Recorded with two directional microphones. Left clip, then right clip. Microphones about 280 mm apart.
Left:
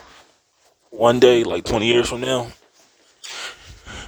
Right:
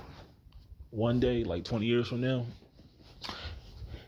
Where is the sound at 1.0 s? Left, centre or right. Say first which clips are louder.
Left 17 dB; left.